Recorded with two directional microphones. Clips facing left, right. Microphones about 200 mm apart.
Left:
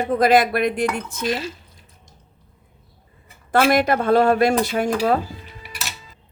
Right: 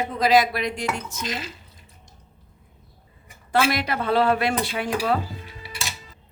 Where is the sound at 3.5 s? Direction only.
50° left (ahead or behind).